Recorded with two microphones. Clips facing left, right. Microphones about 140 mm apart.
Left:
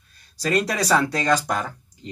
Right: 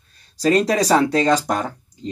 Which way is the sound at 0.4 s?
25° right (ahead or behind).